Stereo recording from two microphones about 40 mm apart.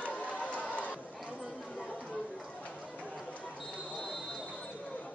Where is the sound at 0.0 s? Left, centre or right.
Left.